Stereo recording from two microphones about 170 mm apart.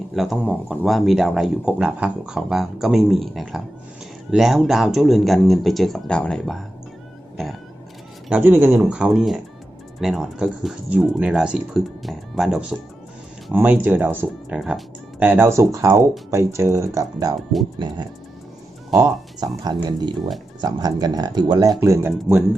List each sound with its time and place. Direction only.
0.1 s speech: centre (ahead or behind)
8.3 s speech: 10° right (ahead or behind)
18.9 s speech: 20° right (ahead or behind)